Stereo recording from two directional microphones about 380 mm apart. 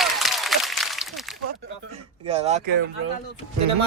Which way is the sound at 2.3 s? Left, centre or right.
Centre.